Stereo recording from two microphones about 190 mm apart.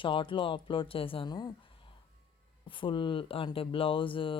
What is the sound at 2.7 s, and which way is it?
Speech, 25° left (ahead or behind).